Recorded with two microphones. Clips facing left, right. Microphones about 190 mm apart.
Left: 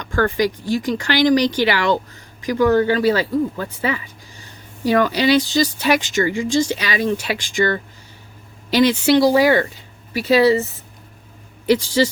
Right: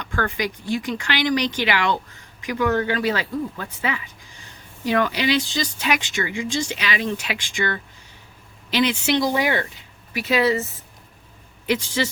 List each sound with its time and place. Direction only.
0.0 s speech: 40° left (ahead or behind)
11.6 s speech: 35° left (ahead or behind)